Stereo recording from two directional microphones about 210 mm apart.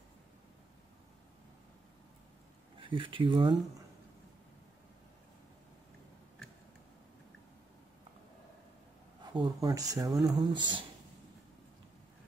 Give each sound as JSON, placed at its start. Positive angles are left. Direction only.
{"t": 2.8, "sound": "speech", "side_deg": -25}
{"t": 9.2, "sound": "speech", "side_deg": -20}